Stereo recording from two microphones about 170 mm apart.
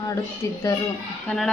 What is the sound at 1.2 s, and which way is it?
Music, 5° left (ahead or behind).